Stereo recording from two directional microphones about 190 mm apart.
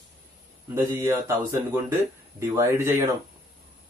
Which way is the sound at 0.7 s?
15° right (ahead or behind).